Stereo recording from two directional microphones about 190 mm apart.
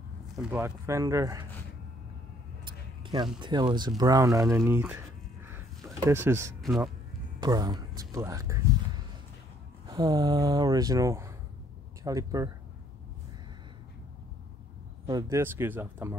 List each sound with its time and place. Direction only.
0.5 s speech: 15° right (ahead or behind)
2.6 s a sound: 25° right (ahead or behind)
3.3 s speech: 25° right (ahead or behind)
6.0 s speech: 15° right (ahead or behind)
9.8 s speech: 20° right (ahead or behind)
15.0 s speech: 20° right (ahead or behind)